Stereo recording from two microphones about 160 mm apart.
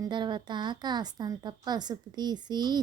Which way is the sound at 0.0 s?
30° right (ahead or behind).